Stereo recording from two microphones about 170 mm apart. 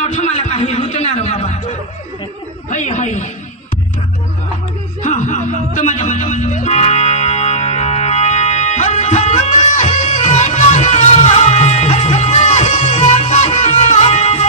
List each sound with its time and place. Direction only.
0.0 s a sound: 40° left (ahead or behind)
2.7 s chuckle: 45° left (ahead or behind)
5.0 s music: 45° left (ahead or behind)